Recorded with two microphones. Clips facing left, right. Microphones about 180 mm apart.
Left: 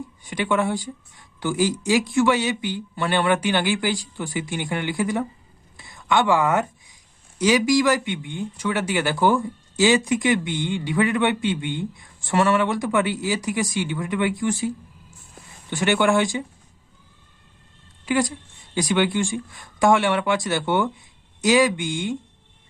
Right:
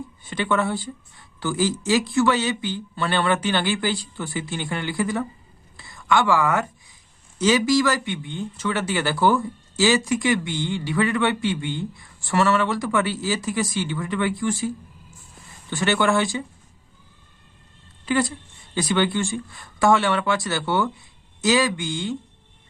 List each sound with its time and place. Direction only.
0.3 s speech: 15° left (ahead or behind)
5.7 s a sound: 20° left (ahead or behind)
7.3 s speech: 10° left (ahead or behind)
15.7 s speech: 15° left (ahead or behind)
18.0 s speech: 15° left (ahead or behind)